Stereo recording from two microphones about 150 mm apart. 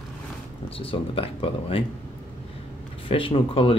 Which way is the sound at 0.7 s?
35° left (ahead or behind).